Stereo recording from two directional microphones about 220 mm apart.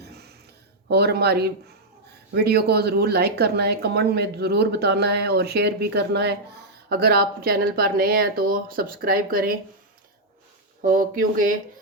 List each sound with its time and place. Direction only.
0.9 s speech: 45° right (ahead or behind)
10.8 s speech: 35° right (ahead or behind)